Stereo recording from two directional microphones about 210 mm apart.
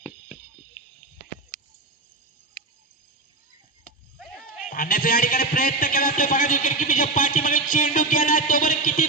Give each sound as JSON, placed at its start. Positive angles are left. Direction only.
{"t": 4.7, "sound": "a man's voice", "side_deg": 45}